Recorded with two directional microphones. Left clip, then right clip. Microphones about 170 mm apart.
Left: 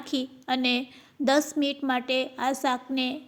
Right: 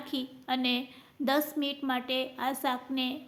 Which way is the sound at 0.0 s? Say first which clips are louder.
Left 5 dB; 35° left (ahead or behind).